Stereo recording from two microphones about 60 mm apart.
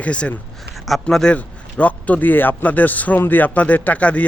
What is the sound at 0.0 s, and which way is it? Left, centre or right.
A man's voice, left.